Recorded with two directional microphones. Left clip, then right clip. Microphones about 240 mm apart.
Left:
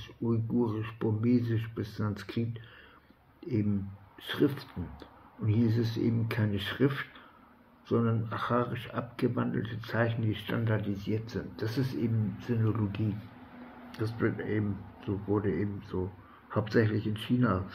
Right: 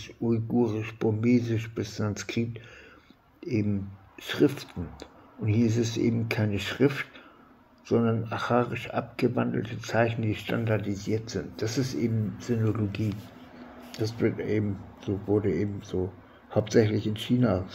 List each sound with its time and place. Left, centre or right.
0.7 s speech: centre
4.2 s speech: centre